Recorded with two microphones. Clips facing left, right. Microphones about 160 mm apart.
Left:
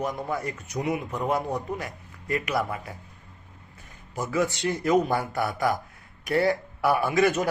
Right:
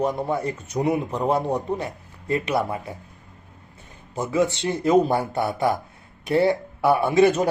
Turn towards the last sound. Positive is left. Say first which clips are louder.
# right 5 dB
turn(degrees=-30)  # may be behind; listen again after turning